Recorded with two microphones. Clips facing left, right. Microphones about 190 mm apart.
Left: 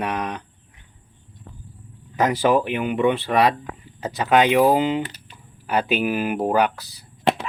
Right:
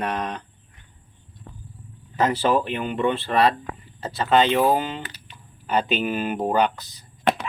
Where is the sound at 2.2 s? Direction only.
15° left (ahead or behind).